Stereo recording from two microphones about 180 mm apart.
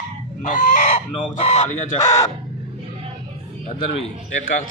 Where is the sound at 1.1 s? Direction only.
30° left (ahead or behind).